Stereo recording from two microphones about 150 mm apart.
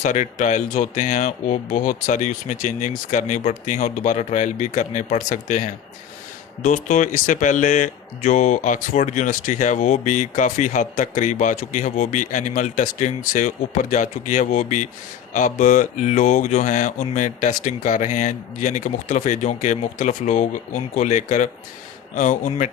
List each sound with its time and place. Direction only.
0.0 s speech: 55° left (ahead or behind)